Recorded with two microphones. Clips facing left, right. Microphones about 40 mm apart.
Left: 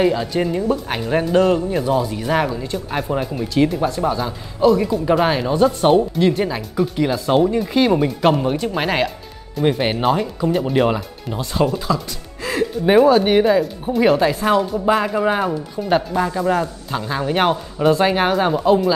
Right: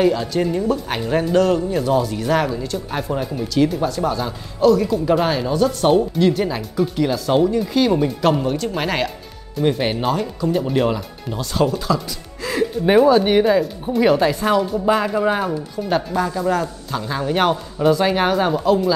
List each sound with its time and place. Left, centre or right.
0.0 s speech: centre
1.3 s speech: centre
6.1 s speech: centre
12.4 s music: centre
13.0 s speech: centre